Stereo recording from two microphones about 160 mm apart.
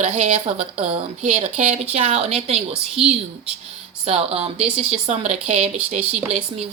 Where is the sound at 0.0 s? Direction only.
45° right (ahead or behind).